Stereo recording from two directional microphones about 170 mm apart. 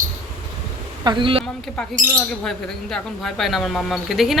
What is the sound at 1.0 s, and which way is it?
Speech, 30° right (ahead or behind).